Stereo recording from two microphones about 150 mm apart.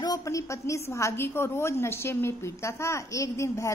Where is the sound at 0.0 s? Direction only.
25° left (ahead or behind).